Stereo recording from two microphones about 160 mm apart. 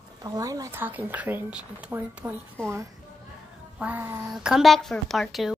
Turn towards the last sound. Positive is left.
turn(degrees=0)  # may be behind; listen again after turning